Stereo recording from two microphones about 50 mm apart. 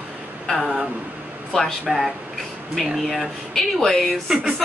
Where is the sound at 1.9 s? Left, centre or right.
Centre.